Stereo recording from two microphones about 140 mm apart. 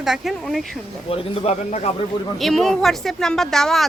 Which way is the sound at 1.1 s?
40° left (ahead or behind).